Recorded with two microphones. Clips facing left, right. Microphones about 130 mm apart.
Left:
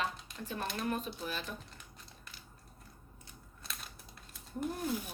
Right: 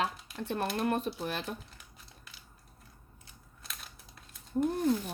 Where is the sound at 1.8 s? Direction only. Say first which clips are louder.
Left 1 dB; centre (ahead or behind).